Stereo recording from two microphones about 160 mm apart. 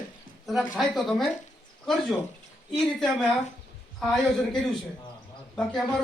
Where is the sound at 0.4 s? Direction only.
Centre (ahead or behind).